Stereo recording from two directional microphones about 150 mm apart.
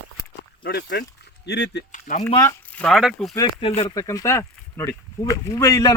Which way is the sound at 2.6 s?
10° left (ahead or behind).